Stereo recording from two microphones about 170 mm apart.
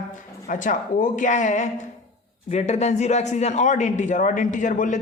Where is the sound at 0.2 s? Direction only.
50° left (ahead or behind).